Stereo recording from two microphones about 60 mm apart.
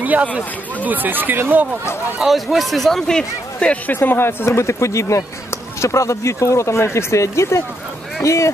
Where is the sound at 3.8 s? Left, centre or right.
Left.